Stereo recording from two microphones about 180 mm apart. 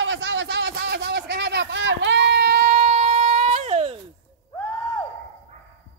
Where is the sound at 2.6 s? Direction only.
40° right (ahead or behind).